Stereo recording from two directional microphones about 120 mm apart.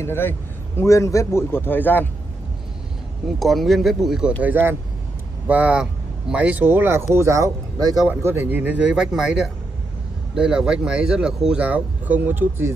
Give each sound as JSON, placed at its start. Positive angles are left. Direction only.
{"t": 0.0, "sound": "a man's voice", "side_deg": 20}
{"t": 3.3, "sound": "speech", "side_deg": 0}
{"t": 4.4, "sound": "speech", "side_deg": -15}